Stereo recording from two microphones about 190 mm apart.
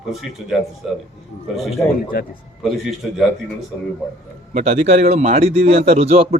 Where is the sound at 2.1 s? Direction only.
50° left (ahead or behind).